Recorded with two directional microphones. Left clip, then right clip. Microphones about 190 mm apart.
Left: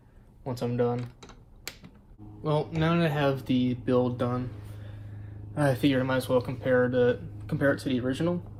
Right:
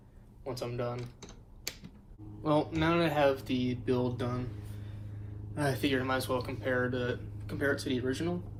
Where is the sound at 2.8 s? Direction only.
50° left (ahead or behind).